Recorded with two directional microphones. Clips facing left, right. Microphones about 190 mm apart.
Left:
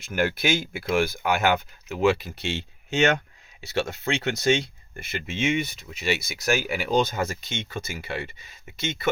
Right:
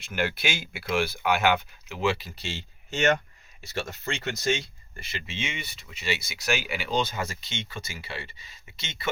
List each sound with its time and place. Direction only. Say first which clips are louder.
0.0 s speech: left 4 dB; 45° left (ahead or behind)